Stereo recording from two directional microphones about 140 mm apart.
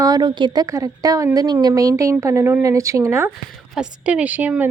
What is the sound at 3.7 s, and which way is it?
Speech, 5° right (ahead or behind).